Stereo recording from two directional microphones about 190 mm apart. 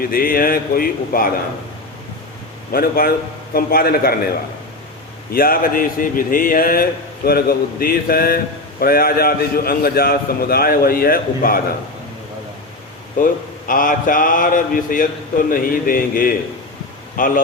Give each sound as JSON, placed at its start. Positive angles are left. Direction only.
{"t": 0.0, "sound": "speech", "side_deg": 50}
{"t": 2.7, "sound": "speech", "side_deg": 50}
{"t": 5.3, "sound": "speech", "side_deg": 50}
{"t": 13.1, "sound": "speech", "side_deg": 45}